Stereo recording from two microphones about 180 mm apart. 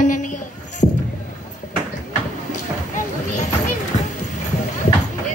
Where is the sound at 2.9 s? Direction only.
40° left (ahead or behind).